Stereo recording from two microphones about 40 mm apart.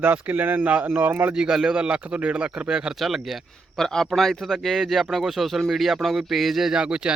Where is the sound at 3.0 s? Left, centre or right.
Centre.